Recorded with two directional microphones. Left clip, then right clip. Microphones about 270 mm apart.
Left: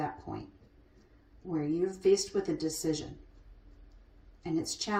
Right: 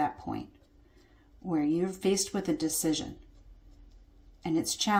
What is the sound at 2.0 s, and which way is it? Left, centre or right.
Speech, right.